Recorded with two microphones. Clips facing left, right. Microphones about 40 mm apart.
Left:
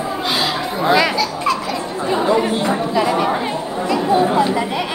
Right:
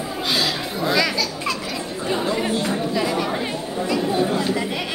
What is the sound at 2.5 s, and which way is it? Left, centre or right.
Chatter, left.